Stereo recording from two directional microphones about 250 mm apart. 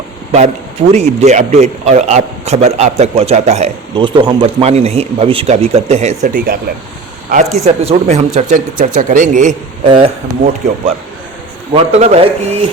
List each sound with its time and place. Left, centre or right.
0.3 s a man's voice: right
7.6 s a man's voice: right